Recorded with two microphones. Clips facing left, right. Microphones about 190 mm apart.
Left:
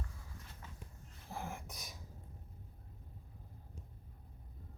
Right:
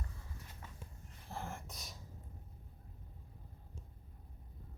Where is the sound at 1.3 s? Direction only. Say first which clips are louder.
Left 1 dB; 15° left (ahead or behind).